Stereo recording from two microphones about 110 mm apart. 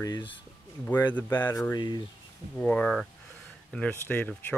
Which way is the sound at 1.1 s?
15° left (ahead or behind).